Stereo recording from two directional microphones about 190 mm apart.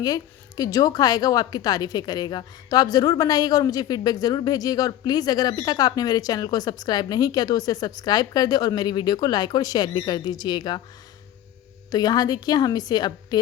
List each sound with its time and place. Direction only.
0.0 s a woman's voice: 20° left (ahead or behind)
11.9 s a woman's voice: 20° left (ahead or behind)